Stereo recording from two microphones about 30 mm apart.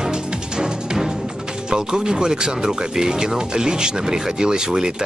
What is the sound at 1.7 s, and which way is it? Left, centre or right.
Speech, right.